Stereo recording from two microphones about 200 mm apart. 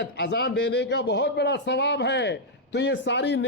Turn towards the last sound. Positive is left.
turn(degrees=60)  # may be behind; listen again after turning